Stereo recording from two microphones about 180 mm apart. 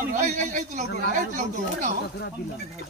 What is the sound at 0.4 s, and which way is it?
Speech, 45° right (ahead or behind).